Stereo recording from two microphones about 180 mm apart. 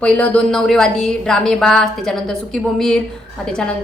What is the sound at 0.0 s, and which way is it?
A woman's voice, 10° left (ahead or behind).